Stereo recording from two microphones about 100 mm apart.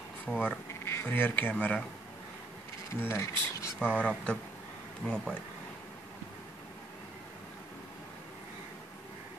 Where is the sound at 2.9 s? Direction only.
25° left (ahead or behind).